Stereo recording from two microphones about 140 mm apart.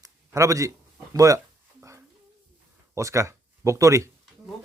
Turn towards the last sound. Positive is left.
turn(degrees=-25)  # may be behind; listen again after turning